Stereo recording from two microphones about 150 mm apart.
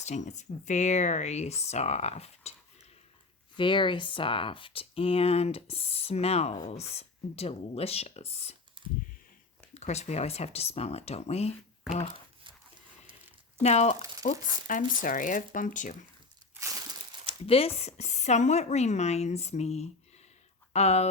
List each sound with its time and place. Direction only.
0.0 s speech: 50° left (ahead or behind)
3.6 s speech: 35° left (ahead or behind)
8.8 s computer keyboard: 35° right (ahead or behind)
9.7 s speech: 50° left (ahead or behind)
13.6 s speech: 50° left (ahead or behind)
14.7 s speech: 65° left (ahead or behind)
17.2 s speech: 40° left (ahead or behind)